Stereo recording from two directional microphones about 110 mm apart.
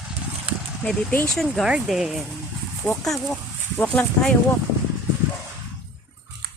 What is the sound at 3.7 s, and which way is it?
Speech, 15° left (ahead or behind).